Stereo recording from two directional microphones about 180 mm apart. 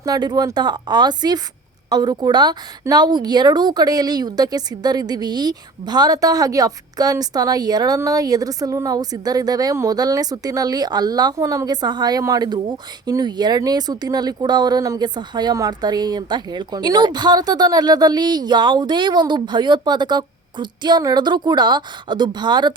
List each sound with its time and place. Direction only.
0.0 s a woman's voice: 25° right (ahead or behind)